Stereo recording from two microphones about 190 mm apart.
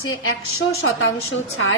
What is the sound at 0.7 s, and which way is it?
A woman's voice, 90° left.